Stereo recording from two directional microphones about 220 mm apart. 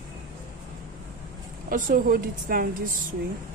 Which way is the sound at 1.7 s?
40° right (ahead or behind).